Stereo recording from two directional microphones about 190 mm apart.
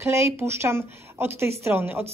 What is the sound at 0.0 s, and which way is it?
Speech, 15° right (ahead or behind).